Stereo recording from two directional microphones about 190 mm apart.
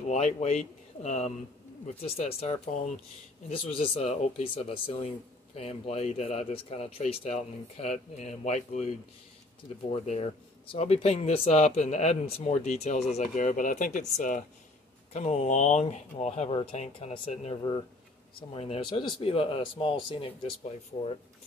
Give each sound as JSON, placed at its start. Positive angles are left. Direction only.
{"t": 0.1, "sound": "speech", "side_deg": 35}